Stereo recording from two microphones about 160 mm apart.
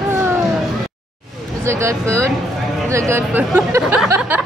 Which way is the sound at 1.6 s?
15° right (ahead or behind).